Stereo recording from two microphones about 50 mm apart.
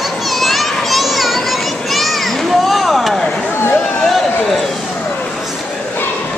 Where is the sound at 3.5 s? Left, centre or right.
Left.